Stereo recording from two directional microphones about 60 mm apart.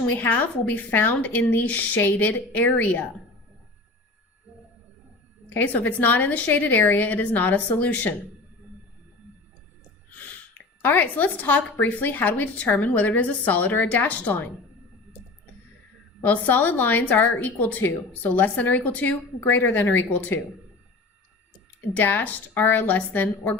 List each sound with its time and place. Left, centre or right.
0.2 s a woman's voice: left
5.5 s a woman's voice: left
10.8 s a woman's voice: left
16.2 s a woman's voice: left
21.8 s a woman's voice: left